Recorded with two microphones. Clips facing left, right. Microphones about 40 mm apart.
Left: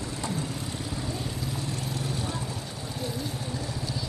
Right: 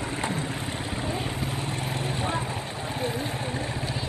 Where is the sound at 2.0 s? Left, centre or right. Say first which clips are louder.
Right 6 dB; right.